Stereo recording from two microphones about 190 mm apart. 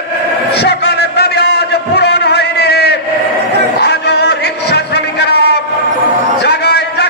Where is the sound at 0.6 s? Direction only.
60° left (ahead or behind).